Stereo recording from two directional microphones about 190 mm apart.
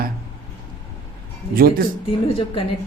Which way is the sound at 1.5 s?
50° right (ahead or behind).